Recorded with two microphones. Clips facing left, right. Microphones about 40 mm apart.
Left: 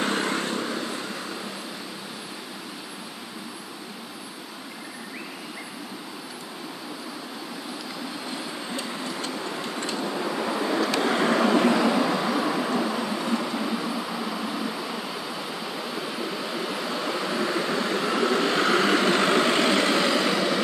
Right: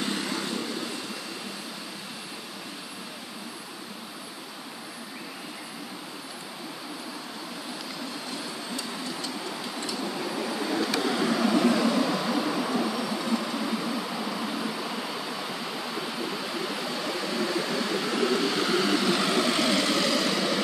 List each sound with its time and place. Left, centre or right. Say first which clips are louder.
0.0 s vehicle: left 5 dB; left
8.7 s vehicle: left 3 dB; left
9.9 s vehicle: left 3 dB; centre
11.0 s vehicle: left 4 dB; left
11.9 s vehicle: left 2 dB; centre
18.3 s vehicle: left 3 dB; left; by 20.6 s centre